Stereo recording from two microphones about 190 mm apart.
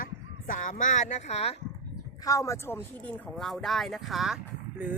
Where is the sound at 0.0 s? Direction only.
45° left (ahead or behind).